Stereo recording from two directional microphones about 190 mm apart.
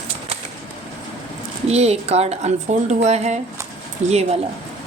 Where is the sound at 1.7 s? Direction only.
35° right (ahead or behind).